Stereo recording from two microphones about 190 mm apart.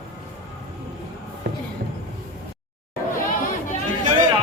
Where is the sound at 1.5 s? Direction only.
60° right (ahead or behind).